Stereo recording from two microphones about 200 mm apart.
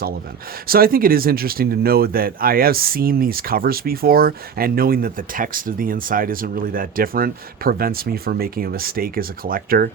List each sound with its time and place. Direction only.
0.7 s speech: 50° right (ahead or behind)